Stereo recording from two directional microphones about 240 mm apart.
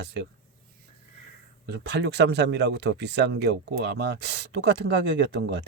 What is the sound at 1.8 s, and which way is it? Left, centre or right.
Speech, right.